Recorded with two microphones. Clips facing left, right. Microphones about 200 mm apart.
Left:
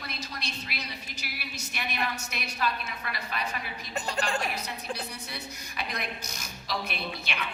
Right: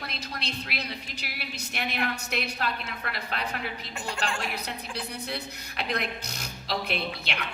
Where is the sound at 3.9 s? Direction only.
35° left (ahead or behind).